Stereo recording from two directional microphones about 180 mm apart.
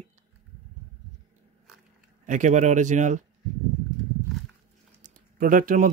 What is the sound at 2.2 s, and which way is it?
Speech, 45° right (ahead or behind).